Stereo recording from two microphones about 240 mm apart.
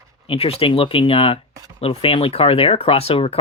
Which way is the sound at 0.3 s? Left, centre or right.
Left.